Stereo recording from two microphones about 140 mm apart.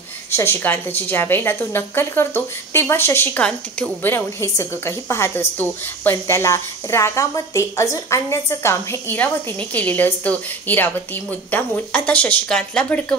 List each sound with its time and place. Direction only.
0.3 s a woman's voice: 15° left (ahead or behind)
4.1 s a woman's voice: 20° left (ahead or behind)